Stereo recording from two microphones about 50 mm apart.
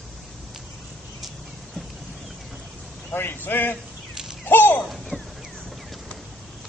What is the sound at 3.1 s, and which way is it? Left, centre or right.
Speech, left.